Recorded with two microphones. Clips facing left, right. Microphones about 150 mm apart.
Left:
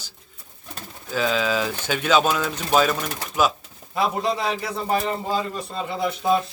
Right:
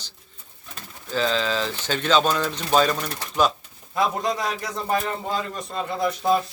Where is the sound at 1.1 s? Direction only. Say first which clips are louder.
Left 1 dB; 10° left (ahead or behind).